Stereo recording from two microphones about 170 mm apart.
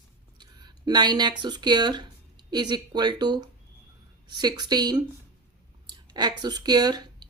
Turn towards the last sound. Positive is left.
turn(degrees=-25)  # may be behind; listen again after turning